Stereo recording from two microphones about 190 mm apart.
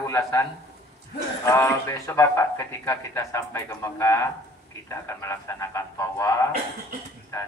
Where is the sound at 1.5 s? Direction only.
15° left (ahead or behind).